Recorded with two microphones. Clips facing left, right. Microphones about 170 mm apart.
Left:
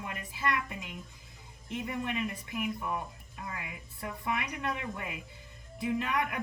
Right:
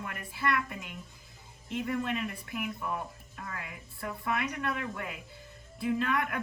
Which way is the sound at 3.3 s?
20° left (ahead or behind).